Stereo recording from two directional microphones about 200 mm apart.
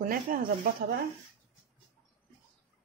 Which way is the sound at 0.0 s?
45° right (ahead or behind).